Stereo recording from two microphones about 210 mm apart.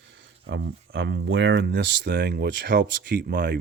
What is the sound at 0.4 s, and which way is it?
Speech, 55° right (ahead or behind).